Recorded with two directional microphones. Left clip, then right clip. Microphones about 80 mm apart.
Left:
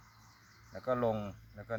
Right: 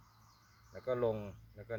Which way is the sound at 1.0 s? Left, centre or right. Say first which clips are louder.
Even; left.